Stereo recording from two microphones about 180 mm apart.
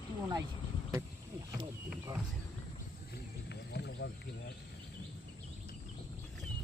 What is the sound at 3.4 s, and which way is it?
Wild animals, 70° left (ahead or behind).